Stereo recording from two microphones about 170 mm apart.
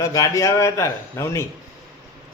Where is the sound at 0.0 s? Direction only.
20° left (ahead or behind).